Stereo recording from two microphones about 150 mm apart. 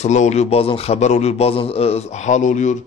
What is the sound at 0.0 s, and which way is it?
A man's voice, 50° left (ahead or behind).